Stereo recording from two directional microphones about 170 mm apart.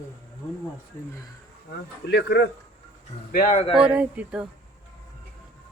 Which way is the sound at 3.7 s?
5° right (ahead or behind).